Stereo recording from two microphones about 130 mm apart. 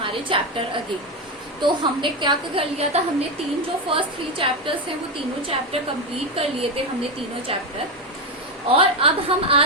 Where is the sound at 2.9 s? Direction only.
55° right (ahead or behind).